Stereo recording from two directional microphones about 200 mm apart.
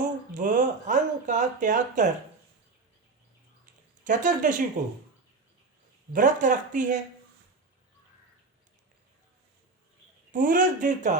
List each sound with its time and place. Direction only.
0.0 s speech: 40° right (ahead or behind)
4.0 s speech: 40° right (ahead or behind)
6.1 s speech: 40° right (ahead or behind)
10.3 s speech: 40° right (ahead or behind)